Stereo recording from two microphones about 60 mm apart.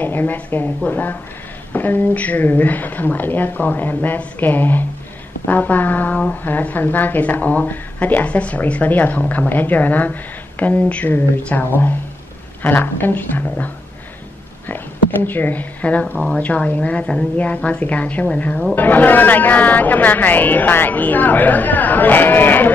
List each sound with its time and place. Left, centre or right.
0.0 s speech: left
14.7 s speech: left; by 18.7 s centre
18.8 s speech: left